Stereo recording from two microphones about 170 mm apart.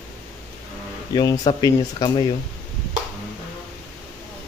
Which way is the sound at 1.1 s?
25° left (ahead or behind).